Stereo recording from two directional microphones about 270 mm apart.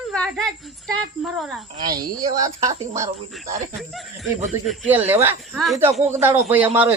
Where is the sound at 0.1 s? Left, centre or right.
Centre.